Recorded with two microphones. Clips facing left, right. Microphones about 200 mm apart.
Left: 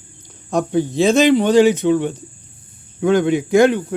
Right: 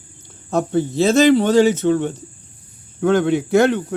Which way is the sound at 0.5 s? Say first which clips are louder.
Left 1 dB; 15° left (ahead or behind).